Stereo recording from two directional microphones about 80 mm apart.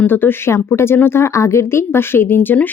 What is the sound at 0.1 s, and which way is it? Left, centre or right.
Speech, left.